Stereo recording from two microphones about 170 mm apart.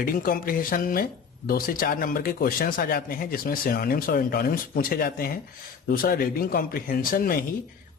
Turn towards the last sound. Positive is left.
turn(degrees=55)  # may be behind; listen again after turning